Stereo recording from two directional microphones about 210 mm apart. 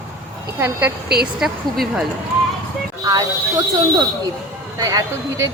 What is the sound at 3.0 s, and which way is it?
Speech, 20° right (ahead or behind).